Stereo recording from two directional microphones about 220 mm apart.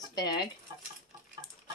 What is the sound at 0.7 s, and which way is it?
Rodents, 20° right (ahead or behind).